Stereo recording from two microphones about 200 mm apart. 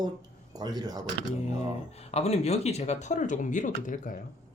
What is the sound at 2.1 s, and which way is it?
Speech, 30° left (ahead or behind).